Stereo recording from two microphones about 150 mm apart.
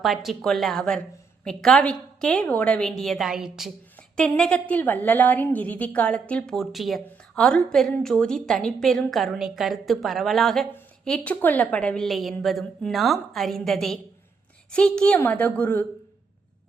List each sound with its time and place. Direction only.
0.0 s a woman's voice: centre (ahead or behind)